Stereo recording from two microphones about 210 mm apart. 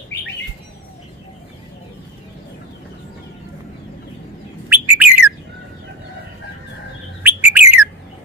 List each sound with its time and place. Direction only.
4.6 s bird: 10° right (ahead or behind)
7.2 s bird: 10° right (ahead or behind)